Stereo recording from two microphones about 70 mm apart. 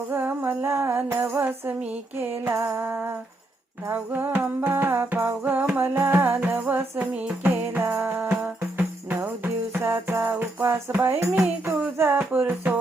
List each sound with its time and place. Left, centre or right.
0.1 s music: right
2.5 s music: right